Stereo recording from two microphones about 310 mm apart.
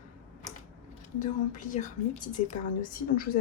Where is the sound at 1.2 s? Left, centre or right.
Left.